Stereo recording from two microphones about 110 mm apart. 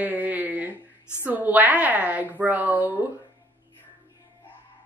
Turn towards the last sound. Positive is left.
turn(degrees=-15)  # may be behind; listen again after turning